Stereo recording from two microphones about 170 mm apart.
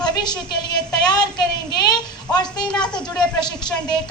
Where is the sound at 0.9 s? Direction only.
25° left (ahead or behind).